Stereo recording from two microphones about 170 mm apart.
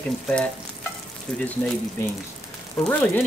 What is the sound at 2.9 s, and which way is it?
Speech, 5° left (ahead or behind).